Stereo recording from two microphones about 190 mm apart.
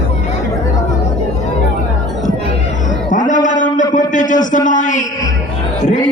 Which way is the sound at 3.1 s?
40° left (ahead or behind).